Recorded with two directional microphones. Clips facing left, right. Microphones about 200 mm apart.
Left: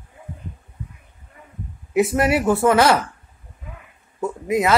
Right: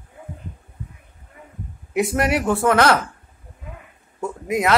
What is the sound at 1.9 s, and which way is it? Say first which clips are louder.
Speech: left 2 dB; centre (ahead or behind).